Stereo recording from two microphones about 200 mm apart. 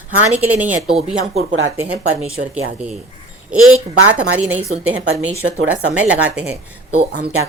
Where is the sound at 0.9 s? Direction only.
30° right (ahead or behind).